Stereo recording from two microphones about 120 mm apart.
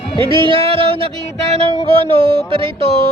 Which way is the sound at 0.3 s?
45° right (ahead or behind).